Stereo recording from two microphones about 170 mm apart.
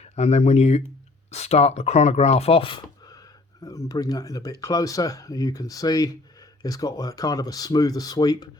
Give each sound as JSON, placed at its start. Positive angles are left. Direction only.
{"t": 0.0, "sound": "speech", "side_deg": 40}